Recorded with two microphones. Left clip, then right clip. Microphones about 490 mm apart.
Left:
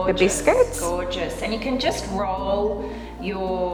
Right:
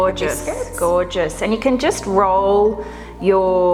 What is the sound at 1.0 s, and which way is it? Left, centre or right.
A woman's voice, right.